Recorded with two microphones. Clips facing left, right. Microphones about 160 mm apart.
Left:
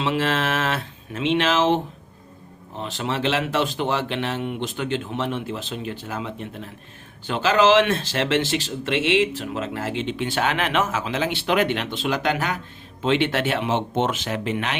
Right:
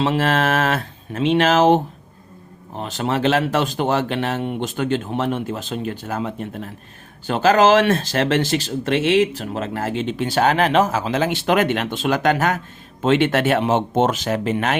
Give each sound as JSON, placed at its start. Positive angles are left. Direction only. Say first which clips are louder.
{"t": 0.0, "sound": "speech", "louder": "right 4 dB", "side_deg": -40}
{"t": 2.8, "sound": "speech", "louder": "right 5 dB", "side_deg": -45}